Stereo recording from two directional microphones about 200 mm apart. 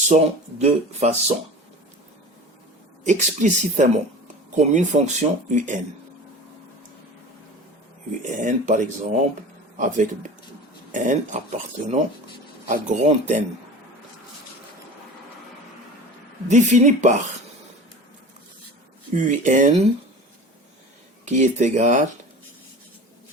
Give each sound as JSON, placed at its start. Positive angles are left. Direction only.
{"t": 0.6, "sound": "speech", "side_deg": -35}
{"t": 3.0, "sound": "speech", "side_deg": -35}
{"t": 8.2, "sound": "speech", "side_deg": -40}
{"t": 16.5, "sound": "speech", "side_deg": -40}
{"t": 19.1, "sound": "speech", "side_deg": -40}
{"t": 21.2, "sound": "speech", "side_deg": -35}